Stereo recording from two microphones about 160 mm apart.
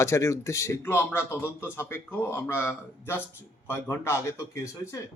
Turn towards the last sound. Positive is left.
turn(degrees=15)  # may be behind; listen again after turning